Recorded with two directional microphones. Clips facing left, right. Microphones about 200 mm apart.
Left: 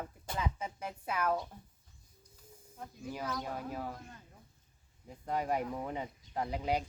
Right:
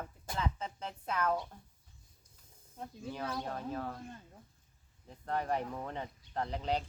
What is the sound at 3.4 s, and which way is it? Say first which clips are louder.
Speech: right 1 dB; 10° left (ahead or behind).